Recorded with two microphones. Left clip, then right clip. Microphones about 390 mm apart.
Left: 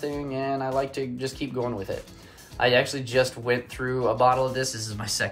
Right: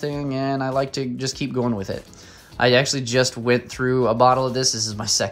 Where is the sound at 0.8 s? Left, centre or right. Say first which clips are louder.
Right 4 dB; centre.